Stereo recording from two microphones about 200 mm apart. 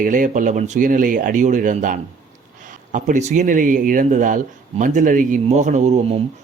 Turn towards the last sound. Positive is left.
turn(degrees=-30)  # may be behind; listen again after turning